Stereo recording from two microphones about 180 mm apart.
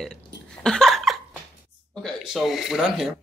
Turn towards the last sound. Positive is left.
turn(degrees=-5)  # may be behind; listen again after turning